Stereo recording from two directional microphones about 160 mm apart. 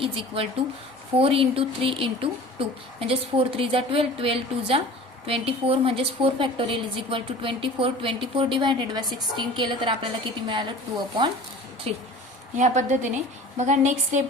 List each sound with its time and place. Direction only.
0.0 s a woman's voice: 35° right (ahead or behind)
11.9 s a woman's voice: 40° right (ahead or behind)
12.5 s a woman's voice: 50° right (ahead or behind)